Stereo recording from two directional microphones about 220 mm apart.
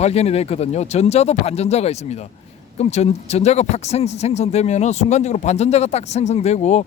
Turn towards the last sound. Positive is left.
turn(degrees=30)  # may be behind; listen again after turning